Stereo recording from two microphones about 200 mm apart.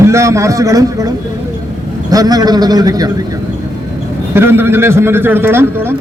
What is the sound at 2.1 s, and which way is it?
A man's voice, 20° right (ahead or behind).